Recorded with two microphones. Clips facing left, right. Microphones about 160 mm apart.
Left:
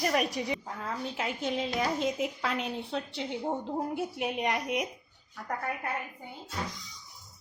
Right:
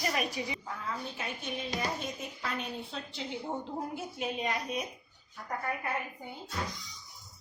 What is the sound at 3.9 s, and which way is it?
Speech, 60° left (ahead or behind).